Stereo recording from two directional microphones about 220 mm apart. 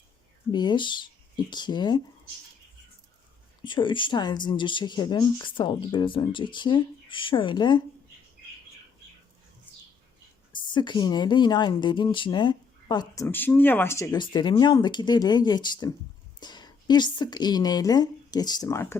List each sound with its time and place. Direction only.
0.5 s speech: 20° left (ahead or behind)
3.6 s speech: 20° left (ahead or behind)
10.5 s a woman's voice: 20° left (ahead or behind)